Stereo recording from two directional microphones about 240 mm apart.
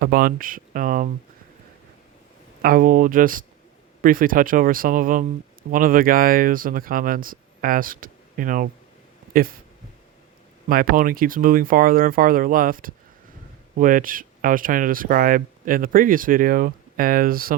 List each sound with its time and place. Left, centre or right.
0.0 s speech: right
2.6 s speech: right
10.7 s speech: right